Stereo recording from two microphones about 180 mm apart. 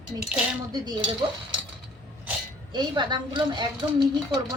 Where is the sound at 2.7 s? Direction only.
25° right (ahead or behind).